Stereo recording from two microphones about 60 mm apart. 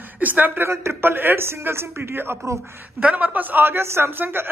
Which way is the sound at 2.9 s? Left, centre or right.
Right.